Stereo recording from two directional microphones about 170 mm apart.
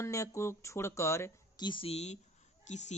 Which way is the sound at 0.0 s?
15° left (ahead or behind).